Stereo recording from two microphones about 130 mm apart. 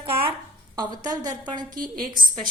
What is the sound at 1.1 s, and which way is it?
Speech, 30° right (ahead or behind).